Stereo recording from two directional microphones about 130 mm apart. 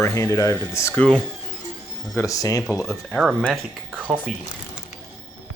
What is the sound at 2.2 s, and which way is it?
Speech, 25° left (ahead or behind).